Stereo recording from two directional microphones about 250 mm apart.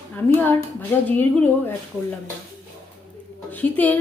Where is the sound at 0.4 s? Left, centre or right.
Centre.